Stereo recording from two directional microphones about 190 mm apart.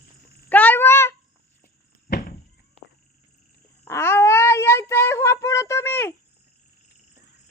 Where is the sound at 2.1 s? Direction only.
45° left (ahead or behind).